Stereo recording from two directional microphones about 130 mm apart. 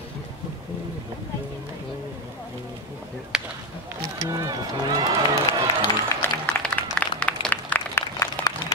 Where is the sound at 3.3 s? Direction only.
5° right (ahead or behind).